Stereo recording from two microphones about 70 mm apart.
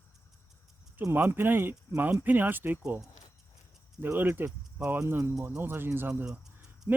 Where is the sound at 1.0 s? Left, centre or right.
Right.